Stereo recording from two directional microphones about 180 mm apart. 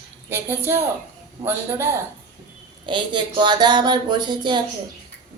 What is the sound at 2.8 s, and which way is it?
Speech, 25° right (ahead or behind).